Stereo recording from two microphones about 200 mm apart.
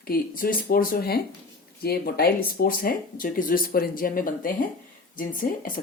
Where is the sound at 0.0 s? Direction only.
45° left (ahead or behind).